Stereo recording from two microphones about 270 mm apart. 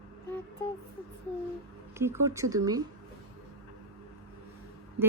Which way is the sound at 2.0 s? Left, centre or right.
Centre.